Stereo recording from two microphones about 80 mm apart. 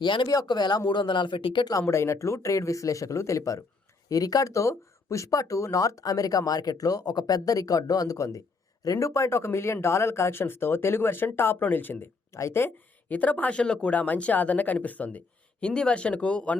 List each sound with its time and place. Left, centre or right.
0.0 s speech: left
0.4 s speech: left
1.8 s speech: left
12.3 s speech: left
13.1 s speech: centre